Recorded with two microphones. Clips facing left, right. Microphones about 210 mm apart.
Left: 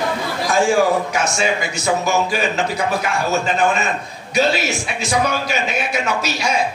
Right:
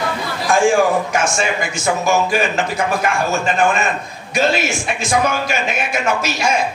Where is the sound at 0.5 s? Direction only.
50° right (ahead or behind).